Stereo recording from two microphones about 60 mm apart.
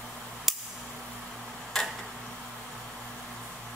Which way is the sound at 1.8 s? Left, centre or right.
Centre.